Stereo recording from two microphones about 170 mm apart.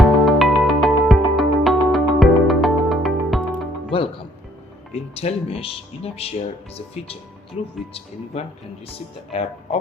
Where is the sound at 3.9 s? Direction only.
30° left (ahead or behind).